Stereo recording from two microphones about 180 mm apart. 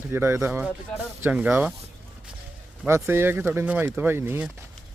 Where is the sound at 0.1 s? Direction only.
15° right (ahead or behind).